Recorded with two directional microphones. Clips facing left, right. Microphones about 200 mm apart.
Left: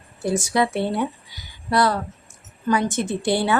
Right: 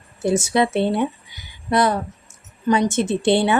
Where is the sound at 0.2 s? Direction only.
25° right (ahead or behind).